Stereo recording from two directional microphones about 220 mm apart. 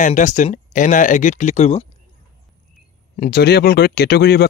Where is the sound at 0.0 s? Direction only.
35° left (ahead or behind).